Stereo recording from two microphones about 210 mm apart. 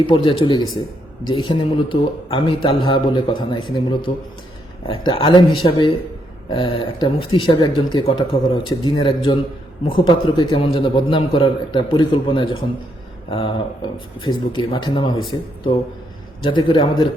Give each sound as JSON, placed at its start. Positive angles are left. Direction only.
{"t": 0.1, "sound": "a man's voice", "side_deg": 25}
{"t": 16.6, "sound": "a man's voice", "side_deg": 20}